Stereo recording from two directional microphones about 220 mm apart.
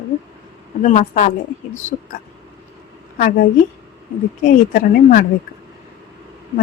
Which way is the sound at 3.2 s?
40° left (ahead or behind).